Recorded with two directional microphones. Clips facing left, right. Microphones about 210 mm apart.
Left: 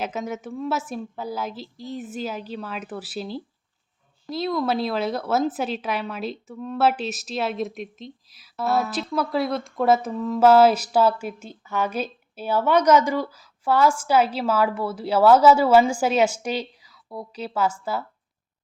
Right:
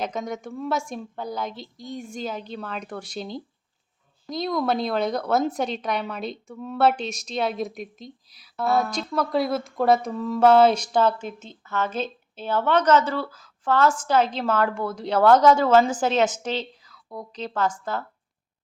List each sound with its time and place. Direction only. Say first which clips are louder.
0.0 s a woman's voice: even; 5° left (ahead or behind)